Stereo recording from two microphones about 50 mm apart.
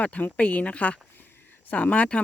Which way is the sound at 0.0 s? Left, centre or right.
Left.